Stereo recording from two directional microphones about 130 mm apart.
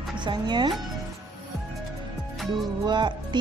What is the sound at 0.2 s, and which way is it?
Speech, 35° right (ahead or behind).